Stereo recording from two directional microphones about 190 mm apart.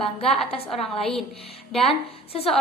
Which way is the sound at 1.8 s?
30° left (ahead or behind).